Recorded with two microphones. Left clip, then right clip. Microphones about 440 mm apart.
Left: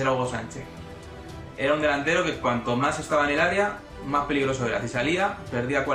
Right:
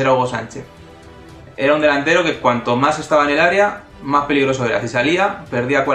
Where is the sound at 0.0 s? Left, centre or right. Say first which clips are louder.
Right 10 dB; right.